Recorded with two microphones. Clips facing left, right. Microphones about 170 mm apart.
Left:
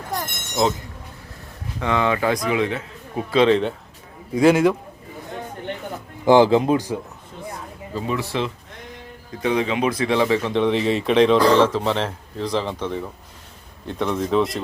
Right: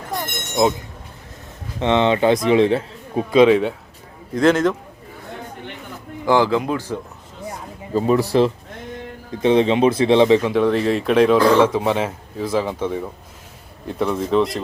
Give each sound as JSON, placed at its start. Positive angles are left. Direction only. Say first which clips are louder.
{"t": 0.6, "sound": "speech", "louder": "right 3 dB", "side_deg": -15}
{"t": 1.8, "sound": "a man's voice", "louder": "right 5 dB", "side_deg": -25}
{"t": 3.3, "sound": "speech", "louder": "right 4 dB", "side_deg": -10}
{"t": 4.4, "sound": "a man's voice", "louder": "left 1 dB", "side_deg": 10}
{"t": 6.2, "sound": "speech", "louder": "left 3 dB", "side_deg": 20}
{"t": 7.9, "sound": "speech", "louder": "right 9 dB", "side_deg": -40}
{"t": 9.4, "sound": "a man's voice", "louder": "right 6 dB", "side_deg": -25}
{"t": 10.5, "sound": "speech", "louder": "right 2 dB", "side_deg": 0}